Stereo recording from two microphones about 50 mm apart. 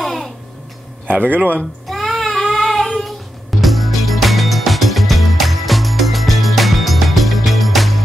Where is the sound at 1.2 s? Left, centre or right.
Right.